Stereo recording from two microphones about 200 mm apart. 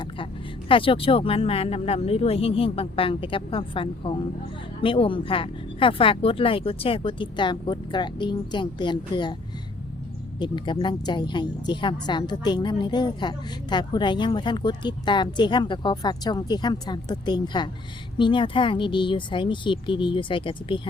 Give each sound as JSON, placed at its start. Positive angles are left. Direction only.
{"t": 0.7, "sound": "a woman's voice", "side_deg": 25}
{"t": 10.4, "sound": "a woman's voice", "side_deg": 20}